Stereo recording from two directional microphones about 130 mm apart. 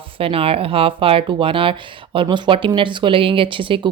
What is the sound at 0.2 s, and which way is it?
Speech, 45° right (ahead or behind).